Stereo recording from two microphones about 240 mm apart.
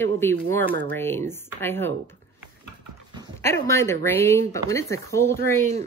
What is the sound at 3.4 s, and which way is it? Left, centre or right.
Speech, centre.